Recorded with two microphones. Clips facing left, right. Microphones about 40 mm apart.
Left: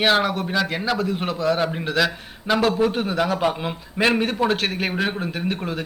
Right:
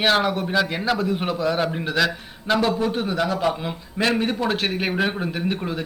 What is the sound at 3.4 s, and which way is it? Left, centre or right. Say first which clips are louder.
A man's voice: left 1 dB; centre.